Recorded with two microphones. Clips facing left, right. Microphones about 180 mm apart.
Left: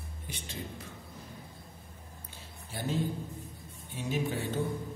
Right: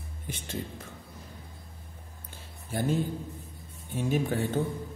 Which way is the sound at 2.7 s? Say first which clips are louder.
Right 7 dB; 50° right (ahead or behind).